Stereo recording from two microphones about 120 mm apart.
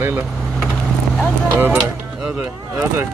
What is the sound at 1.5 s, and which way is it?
Speech, 15° right (ahead or behind).